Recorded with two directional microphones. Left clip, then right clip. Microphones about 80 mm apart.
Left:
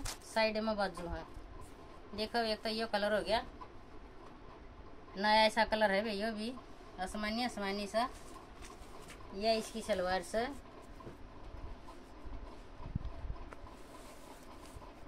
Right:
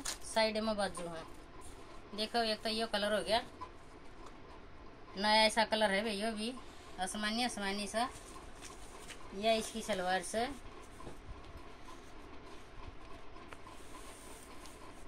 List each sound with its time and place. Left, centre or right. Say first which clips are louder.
0.3 s a woman's voice: even; centre
2.1 s a woman's voice: right 1 dB; left
5.1 s a woman's voice: even; centre
9.4 s a woman's voice: right 1 dB; left